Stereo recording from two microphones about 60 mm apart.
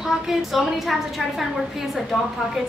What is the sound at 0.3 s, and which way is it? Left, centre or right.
Speech, centre.